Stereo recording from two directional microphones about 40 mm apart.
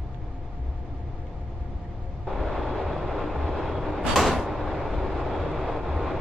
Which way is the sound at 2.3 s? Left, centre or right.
Centre.